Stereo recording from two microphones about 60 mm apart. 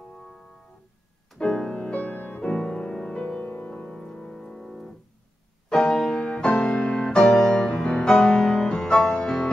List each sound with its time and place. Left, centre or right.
1.4 s music: centre
6.1 s music: centre